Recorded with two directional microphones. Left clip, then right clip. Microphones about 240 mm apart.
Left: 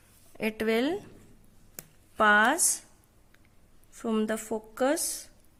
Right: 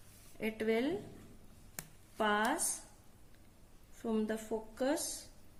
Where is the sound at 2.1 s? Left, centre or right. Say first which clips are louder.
Left 11 dB; left.